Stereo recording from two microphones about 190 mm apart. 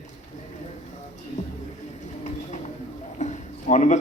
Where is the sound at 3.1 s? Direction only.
35° left (ahead or behind).